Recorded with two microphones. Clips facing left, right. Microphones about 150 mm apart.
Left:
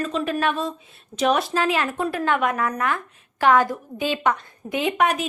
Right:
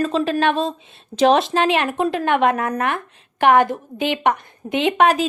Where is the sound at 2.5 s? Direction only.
55° right (ahead or behind).